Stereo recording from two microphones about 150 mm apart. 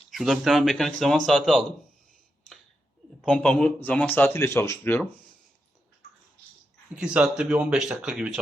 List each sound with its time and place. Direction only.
0.1 s speech: centre (ahead or behind)
3.2 s a man's voice: 5° left (ahead or behind)
6.9 s speech: 5° right (ahead or behind)